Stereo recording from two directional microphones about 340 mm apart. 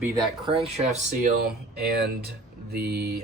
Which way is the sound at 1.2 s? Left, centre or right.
Right.